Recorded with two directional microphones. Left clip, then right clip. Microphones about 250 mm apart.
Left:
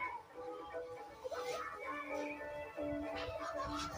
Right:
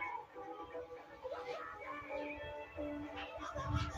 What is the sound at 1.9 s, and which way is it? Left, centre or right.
Music, left.